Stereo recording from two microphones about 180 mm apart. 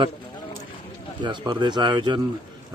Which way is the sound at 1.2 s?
25° right (ahead or behind).